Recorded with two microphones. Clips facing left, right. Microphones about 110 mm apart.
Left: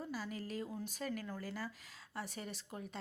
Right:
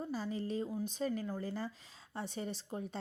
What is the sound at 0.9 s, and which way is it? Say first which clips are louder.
A woman's voice: right 5 dB; 25° right (ahead or behind).